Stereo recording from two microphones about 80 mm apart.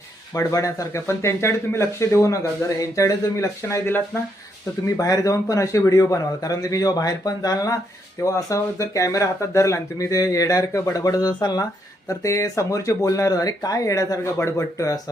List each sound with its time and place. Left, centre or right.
0.3 s speech: left
4.9 s speech: left
11.6 s speech: left